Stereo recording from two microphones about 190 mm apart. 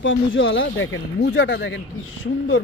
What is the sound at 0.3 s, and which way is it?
Speech, 85° left.